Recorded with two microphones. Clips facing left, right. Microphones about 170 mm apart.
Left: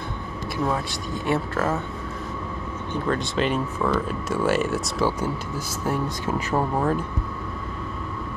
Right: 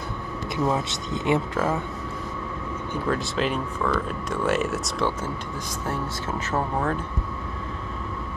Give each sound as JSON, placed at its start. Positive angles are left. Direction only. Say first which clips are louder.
{"t": 0.7, "sound": "speech", "louder": "right 2 dB", "side_deg": -20}
{"t": 2.9, "sound": "speech", "louder": "left 1 dB", "side_deg": -5}